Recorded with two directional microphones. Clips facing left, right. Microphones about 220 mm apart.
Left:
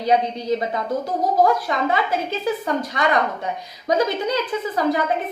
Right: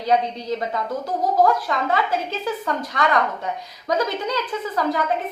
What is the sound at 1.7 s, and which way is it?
A woman's voice, 15° left (ahead or behind).